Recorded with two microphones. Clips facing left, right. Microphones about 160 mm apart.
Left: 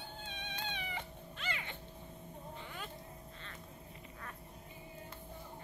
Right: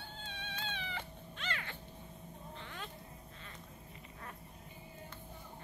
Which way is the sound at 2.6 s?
10° left (ahead or behind).